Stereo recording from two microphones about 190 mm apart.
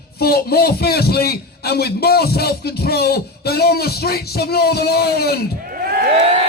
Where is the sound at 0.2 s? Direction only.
55° left (ahead or behind).